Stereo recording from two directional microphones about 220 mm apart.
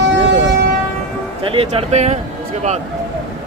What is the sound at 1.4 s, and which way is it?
Speech, 25° right (ahead or behind).